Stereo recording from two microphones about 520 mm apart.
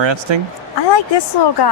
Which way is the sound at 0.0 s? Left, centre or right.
Right.